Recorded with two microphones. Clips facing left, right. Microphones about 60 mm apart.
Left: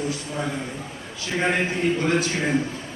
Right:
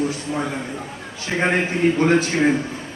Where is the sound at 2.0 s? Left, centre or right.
Right.